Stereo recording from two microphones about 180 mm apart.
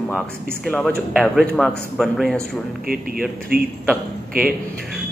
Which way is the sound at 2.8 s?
55° right (ahead or behind).